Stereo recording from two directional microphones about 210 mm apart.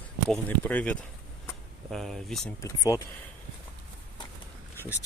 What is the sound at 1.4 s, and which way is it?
Vehicle, centre (ahead or behind).